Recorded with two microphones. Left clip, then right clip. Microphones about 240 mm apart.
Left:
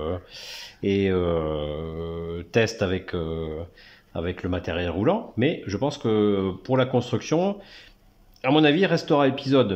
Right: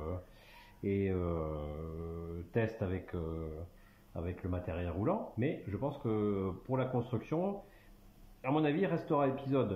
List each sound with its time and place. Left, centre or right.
0.8 s speech: left